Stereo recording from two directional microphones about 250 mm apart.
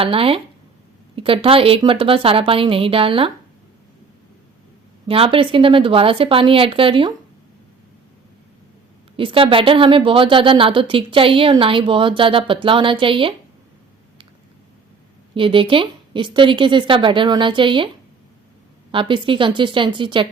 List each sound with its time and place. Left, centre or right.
0.0 s a woman's voice: right
5.0 s a woman's voice: right
9.1 s a woman's voice: right
15.4 s a woman's voice: right
18.9 s a woman's voice: centre